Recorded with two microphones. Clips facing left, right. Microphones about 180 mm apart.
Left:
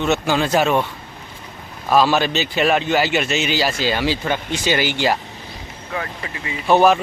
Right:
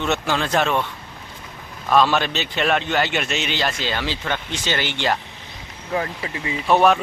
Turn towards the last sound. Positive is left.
turn(degrees=0)  # may be behind; listen again after turning